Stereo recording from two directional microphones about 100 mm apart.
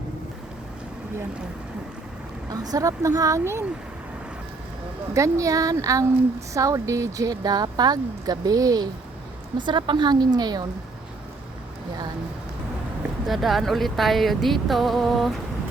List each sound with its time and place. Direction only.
2.5 s speech: 40° right (ahead or behind)
5.1 s speech: 30° right (ahead or behind)
9.6 s speech: 50° right (ahead or behind)
13.2 s speech: centre (ahead or behind)